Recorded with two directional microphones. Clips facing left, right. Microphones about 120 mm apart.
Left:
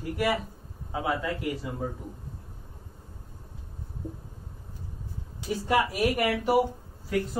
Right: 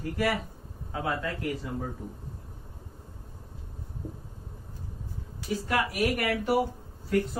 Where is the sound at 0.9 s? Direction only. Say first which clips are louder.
Left 2 dB; 15° left (ahead or behind).